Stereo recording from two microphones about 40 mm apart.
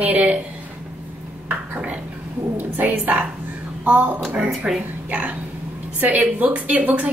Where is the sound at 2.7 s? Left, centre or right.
Right.